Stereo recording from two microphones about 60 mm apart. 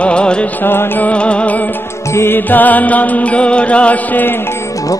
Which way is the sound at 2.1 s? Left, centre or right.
Left.